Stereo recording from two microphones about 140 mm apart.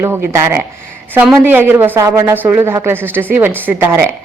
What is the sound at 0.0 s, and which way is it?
A woman's voice, 20° right (ahead or behind).